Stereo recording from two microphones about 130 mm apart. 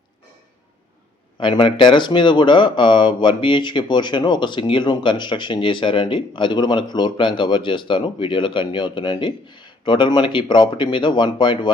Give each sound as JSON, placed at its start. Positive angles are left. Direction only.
{"t": 1.4, "sound": "speech", "side_deg": 40}